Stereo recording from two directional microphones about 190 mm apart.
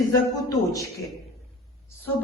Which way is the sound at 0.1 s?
20° left (ahead or behind).